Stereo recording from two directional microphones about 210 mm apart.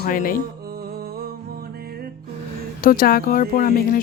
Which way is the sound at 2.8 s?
40° left (ahead or behind).